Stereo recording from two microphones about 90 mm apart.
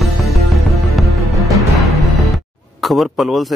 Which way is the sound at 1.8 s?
Centre (ahead or behind).